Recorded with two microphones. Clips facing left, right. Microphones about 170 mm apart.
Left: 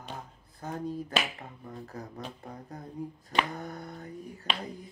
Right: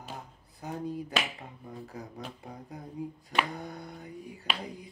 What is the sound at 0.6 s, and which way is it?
Speech, 15° right (ahead or behind).